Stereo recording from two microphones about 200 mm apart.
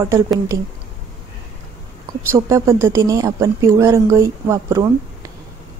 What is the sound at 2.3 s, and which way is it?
Speech, 15° right (ahead or behind).